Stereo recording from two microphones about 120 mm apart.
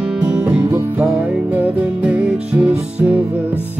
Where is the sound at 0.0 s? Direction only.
10° right (ahead or behind).